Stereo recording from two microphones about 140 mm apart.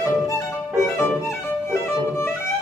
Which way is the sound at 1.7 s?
20° left (ahead or behind).